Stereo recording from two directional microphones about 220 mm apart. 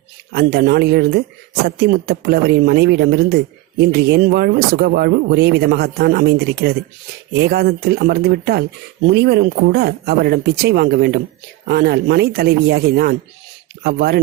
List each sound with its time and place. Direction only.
0.3 s speech: 45° right (ahead or behind)